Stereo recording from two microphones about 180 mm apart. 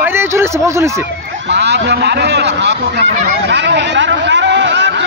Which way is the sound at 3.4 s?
75° right (ahead or behind).